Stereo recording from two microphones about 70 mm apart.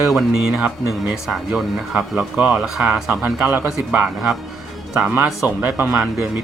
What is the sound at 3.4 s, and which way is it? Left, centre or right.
Speech, right.